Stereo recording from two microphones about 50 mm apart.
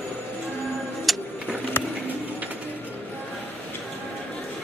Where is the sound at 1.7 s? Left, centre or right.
Left.